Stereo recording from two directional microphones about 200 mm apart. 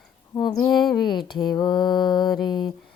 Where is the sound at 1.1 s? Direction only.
20° left (ahead or behind).